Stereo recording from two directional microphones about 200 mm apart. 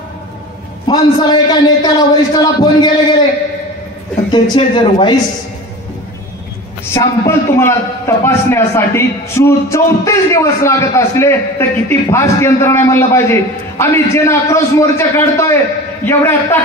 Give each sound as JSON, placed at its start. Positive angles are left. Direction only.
{"t": 0.8, "sound": "a man's voice", "side_deg": 20}
{"t": 4.3, "sound": "a man's voice", "side_deg": 20}
{"t": 6.9, "sound": "a man's voice", "side_deg": 15}